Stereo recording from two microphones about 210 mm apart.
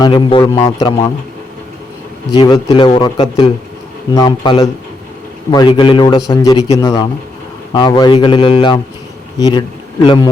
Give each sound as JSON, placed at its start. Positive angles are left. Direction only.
{"t": 0.0, "sound": "a man's voice", "side_deg": 20}
{"t": 2.3, "sound": "a man's voice", "side_deg": 20}